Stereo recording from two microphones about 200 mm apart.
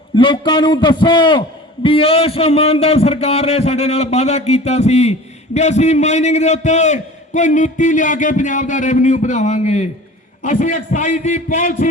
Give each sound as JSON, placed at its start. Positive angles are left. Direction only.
{"t": 0.2, "sound": "a man's voice", "side_deg": 25}